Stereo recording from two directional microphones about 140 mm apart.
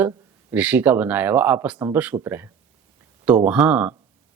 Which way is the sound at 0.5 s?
10° right (ahead or behind).